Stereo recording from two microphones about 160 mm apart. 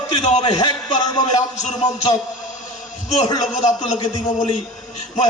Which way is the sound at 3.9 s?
25° left (ahead or behind).